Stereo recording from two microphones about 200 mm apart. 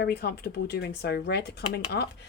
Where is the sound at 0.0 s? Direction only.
55° left (ahead or behind).